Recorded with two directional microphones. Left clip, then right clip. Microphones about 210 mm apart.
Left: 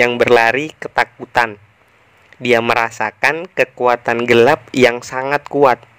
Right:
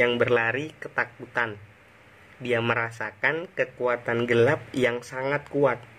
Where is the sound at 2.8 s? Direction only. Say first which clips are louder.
Left 12 dB; 45° left (ahead or behind).